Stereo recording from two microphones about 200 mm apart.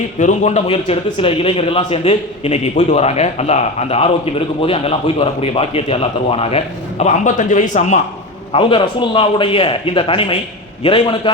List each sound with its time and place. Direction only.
0.2 s a man's voice: 35° left (ahead or behind)
8.5 s speech: 25° left (ahead or behind)